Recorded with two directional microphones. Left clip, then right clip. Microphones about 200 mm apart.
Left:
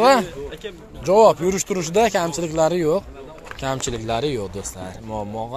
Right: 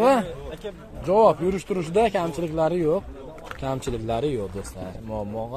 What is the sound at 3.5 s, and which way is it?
Speech, 5° left (ahead or behind).